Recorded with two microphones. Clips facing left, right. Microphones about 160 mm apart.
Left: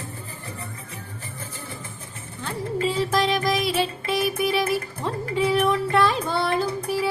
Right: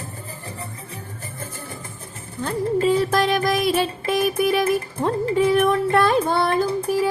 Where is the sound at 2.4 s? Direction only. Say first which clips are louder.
Right 5 dB; 45° right (ahead or behind).